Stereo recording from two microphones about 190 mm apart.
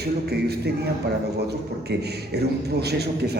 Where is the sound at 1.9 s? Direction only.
60° right (ahead or behind).